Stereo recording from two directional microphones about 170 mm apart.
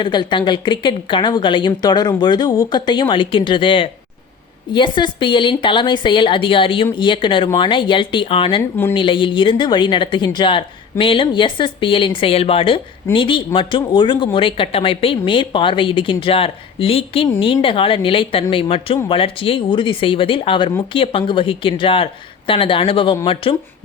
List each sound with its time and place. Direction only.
0.0 s a woman's voice: 25° left (ahead or behind)